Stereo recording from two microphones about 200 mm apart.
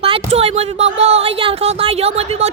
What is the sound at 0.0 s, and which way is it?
Speech, 30° right (ahead or behind).